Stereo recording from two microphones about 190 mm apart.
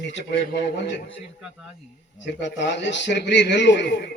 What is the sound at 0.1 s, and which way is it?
Speech, 65° left (ahead or behind).